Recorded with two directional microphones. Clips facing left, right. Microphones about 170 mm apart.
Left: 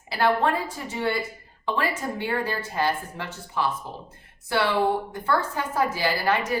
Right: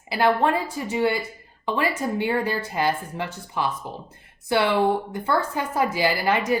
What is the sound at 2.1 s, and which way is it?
Speech, 15° right (ahead or behind).